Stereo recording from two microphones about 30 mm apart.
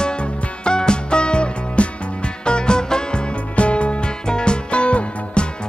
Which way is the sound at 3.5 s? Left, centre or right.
Left.